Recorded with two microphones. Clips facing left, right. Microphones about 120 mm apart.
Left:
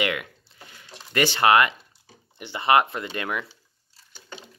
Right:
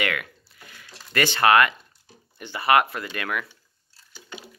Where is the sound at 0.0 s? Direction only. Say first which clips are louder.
Left 1 dB; 20° left (ahead or behind).